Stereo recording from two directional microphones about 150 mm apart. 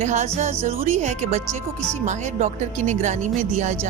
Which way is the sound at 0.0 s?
50° right (ahead or behind).